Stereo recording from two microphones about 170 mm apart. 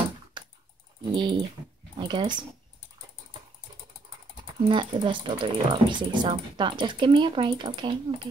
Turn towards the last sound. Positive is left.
turn(degrees=-30)  # may be behind; listen again after turning